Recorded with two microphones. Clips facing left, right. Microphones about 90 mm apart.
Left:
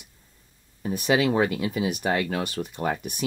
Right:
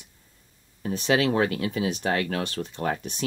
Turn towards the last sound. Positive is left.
turn(degrees=10)  # may be behind; listen again after turning